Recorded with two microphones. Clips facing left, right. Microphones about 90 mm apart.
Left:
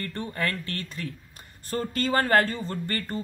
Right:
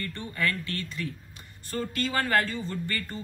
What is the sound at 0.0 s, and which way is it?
Speech, 40° left (ahead or behind).